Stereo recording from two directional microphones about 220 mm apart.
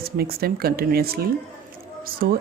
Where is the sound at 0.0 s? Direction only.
45° right (ahead or behind).